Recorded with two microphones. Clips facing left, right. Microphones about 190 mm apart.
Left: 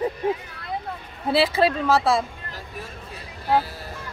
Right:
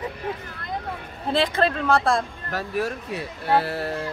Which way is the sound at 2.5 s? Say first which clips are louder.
Right 11 dB; 75° right (ahead or behind).